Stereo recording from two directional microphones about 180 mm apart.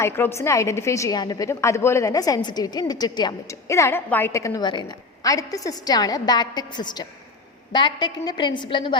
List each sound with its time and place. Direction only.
0.0 s a woman's voice: 15° left (ahead or behind)